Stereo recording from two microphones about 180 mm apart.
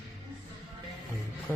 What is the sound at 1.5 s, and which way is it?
Speech, 15° left (ahead or behind).